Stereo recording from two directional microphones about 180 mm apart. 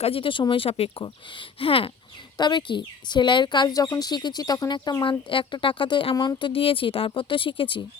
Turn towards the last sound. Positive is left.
turn(degrees=30)  # may be behind; listen again after turning